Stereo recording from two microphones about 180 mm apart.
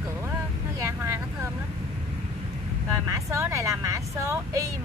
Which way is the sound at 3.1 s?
15° right (ahead or behind).